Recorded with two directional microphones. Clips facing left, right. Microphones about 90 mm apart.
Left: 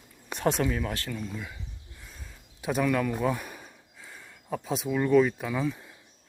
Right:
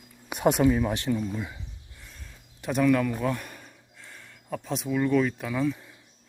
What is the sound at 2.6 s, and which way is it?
Speech, 5° left (ahead or behind).